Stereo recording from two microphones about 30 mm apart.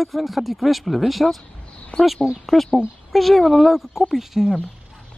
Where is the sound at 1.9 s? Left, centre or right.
Left.